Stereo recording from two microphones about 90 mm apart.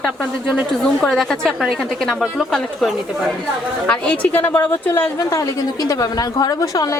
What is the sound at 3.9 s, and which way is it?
A woman's voice, 15° left (ahead or behind).